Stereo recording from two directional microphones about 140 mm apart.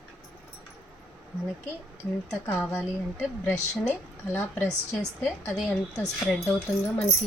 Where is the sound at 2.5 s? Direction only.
10° left (ahead or behind).